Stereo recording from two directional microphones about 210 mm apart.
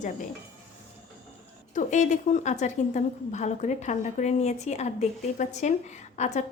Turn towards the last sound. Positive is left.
turn(degrees=35)  # may be behind; listen again after turning